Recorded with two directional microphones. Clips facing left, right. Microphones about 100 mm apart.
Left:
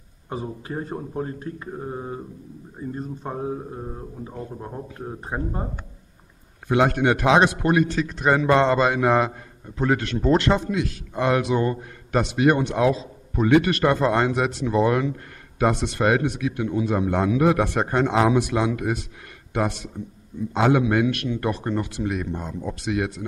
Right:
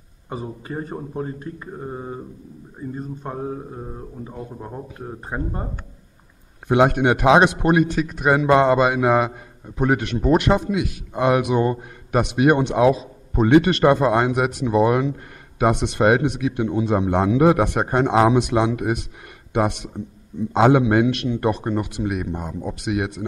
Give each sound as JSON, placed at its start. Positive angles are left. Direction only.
{"t": 0.3, "sound": "speech", "side_deg": 0}
{"t": 6.7, "sound": "a man's voice", "side_deg": -20}
{"t": 13.9, "sound": "a man's voice", "side_deg": -15}